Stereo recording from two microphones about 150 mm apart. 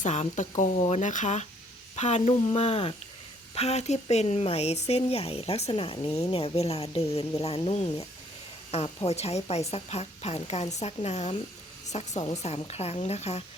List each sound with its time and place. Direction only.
0.0 s speech: 55° left (ahead or behind)